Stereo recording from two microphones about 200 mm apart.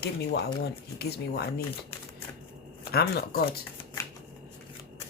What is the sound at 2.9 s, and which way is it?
Speech, 50° left (ahead or behind).